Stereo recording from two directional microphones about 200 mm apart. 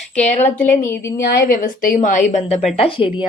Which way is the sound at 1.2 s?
45° left (ahead or behind).